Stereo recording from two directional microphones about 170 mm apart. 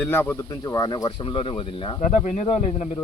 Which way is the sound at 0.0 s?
10° left (ahead or behind).